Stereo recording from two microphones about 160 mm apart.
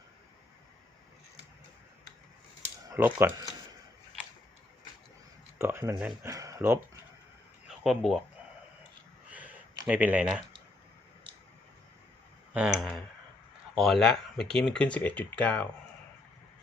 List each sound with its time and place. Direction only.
2.9 s speech: 15° right (ahead or behind)
5.5 s speech: 15° right (ahead or behind)
7.7 s speech: centre (ahead or behind)
9.3 s a sound: 10° right (ahead or behind)
9.8 s speech: 10° right (ahead or behind)
12.5 s speech: 5° right (ahead or behind)